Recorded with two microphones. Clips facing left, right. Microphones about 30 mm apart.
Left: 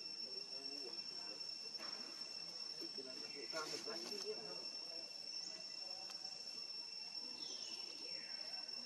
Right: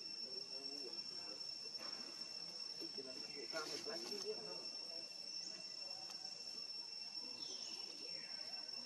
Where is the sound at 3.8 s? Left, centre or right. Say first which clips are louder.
Even; centre.